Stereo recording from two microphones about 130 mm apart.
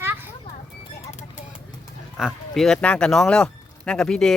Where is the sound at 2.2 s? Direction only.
5° right (ahead or behind).